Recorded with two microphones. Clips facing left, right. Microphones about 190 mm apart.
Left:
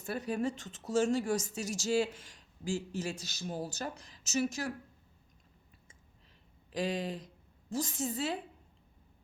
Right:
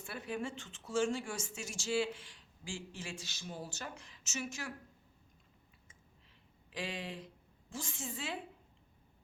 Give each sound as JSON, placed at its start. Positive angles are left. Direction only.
{"t": 0.0, "sound": "a woman's voice", "side_deg": 40}
{"t": 6.7, "sound": "a woman's voice", "side_deg": 40}